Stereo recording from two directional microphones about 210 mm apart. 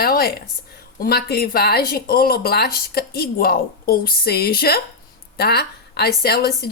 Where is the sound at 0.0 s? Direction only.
45° left (ahead or behind).